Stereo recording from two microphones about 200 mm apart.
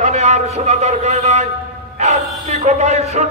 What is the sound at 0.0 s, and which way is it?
A man's voice, 35° right (ahead or behind).